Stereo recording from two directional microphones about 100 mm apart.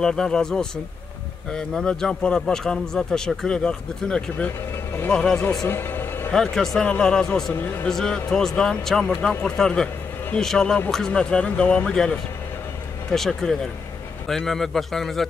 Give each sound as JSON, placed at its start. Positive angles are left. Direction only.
{"t": 0.0, "sound": "a man's voice", "side_deg": 5}
{"t": 5.7, "sound": "music", "side_deg": 20}
{"t": 6.3, "sound": "a man's voice", "side_deg": 5}
{"t": 13.1, "sound": "a man's voice", "side_deg": 5}